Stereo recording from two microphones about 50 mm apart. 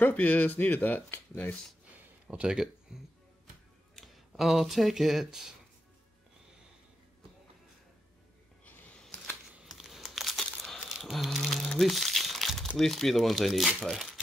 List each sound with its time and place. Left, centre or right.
0.0 s speech: left
2.3 s speech: centre
8.6 s a sound: left
9.8 s crumpling: centre
10.9 s a sound: centre
11.3 s speech: centre
11.8 s crumpling: centre
12.6 s speech: centre